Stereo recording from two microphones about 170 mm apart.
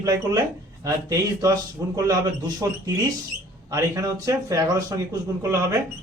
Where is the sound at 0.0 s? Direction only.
20° right (ahead or behind).